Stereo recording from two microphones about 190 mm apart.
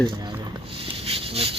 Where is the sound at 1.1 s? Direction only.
30° right (ahead or behind).